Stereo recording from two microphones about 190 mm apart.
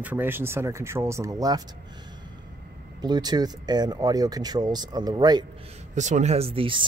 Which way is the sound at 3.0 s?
20° right (ahead or behind).